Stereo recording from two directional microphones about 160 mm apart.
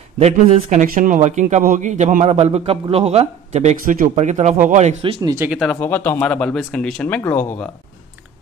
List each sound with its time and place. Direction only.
0.2 s a man's voice: 45° right (ahead or behind)
0.8 s a man's voice: 55° right (ahead or behind)
5.2 s speech: 20° right (ahead or behind)
5.7 s speech: 10° left (ahead or behind)